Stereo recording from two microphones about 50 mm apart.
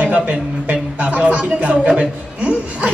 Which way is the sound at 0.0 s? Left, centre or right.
Right.